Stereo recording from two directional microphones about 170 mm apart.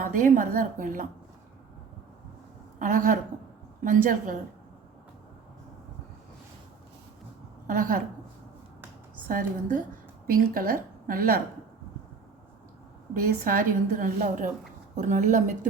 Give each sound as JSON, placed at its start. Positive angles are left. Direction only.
{"t": 0.0, "sound": "a woman's voice", "side_deg": -50}
{"t": 2.7, "sound": "a woman's voice", "side_deg": -50}
{"t": 7.7, "sound": "a woman's voice", "side_deg": -50}
{"t": 9.3, "sound": "a woman's voice", "side_deg": -50}
{"t": 13.1, "sound": "a woman's voice", "side_deg": -60}